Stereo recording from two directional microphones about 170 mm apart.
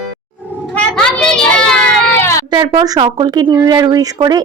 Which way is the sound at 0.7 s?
5° left (ahead or behind).